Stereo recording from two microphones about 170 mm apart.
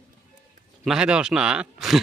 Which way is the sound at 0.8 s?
5° right (ahead or behind).